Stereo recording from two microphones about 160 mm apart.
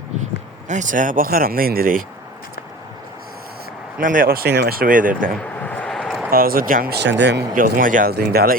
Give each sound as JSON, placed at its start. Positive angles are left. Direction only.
{"t": 0.7, "sound": "speech", "side_deg": -50}
{"t": 4.0, "sound": "speech", "side_deg": -60}
{"t": 5.4, "sound": "a sound", "side_deg": 10}
{"t": 6.3, "sound": "speech", "side_deg": -65}